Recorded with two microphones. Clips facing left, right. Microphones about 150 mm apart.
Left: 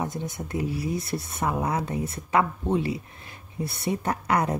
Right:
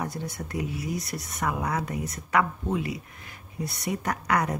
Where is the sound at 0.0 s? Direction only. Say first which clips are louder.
Left 2 dB; 20° left (ahead or behind).